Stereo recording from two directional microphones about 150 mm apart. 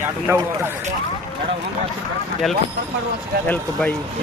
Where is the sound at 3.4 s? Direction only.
10° left (ahead or behind).